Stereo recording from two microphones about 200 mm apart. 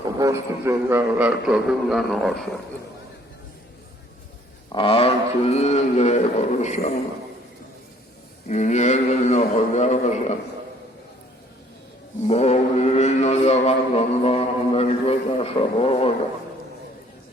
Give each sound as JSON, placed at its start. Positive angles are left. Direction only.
{"t": 0.2, "sound": "a man's voice", "side_deg": -15}
{"t": 4.7, "sound": "speech", "side_deg": 25}
{"t": 8.4, "sound": "speech", "side_deg": 35}
{"t": 12.2, "sound": "speech", "side_deg": 30}